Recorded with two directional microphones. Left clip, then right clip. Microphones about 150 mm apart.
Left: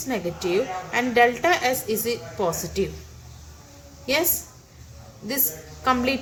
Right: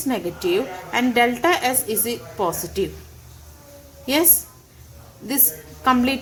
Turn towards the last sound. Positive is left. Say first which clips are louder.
# right 3 dB
turn(degrees=-55)  # may be behind; listen again after turning